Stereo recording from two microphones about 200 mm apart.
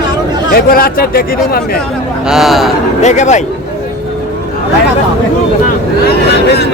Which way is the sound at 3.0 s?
35° left (ahead or behind).